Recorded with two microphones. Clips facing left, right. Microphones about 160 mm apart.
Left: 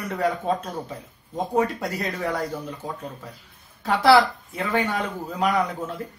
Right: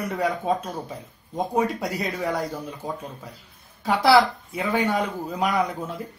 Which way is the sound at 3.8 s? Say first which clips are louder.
Left 1 dB; 5° right (ahead or behind).